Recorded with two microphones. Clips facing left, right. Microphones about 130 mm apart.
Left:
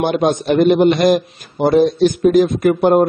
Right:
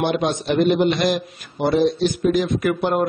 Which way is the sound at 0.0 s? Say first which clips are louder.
Left 5 dB; 45° left (ahead or behind).